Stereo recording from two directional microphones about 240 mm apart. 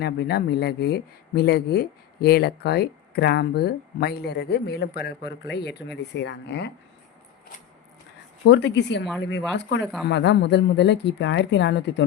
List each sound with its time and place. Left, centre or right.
0.0 s speech: left
8.4 s speech: left